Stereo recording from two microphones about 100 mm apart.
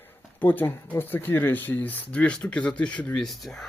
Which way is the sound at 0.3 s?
20° left (ahead or behind).